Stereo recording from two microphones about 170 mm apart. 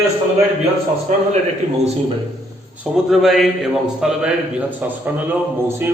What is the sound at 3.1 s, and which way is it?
Mantra, centre (ahead or behind).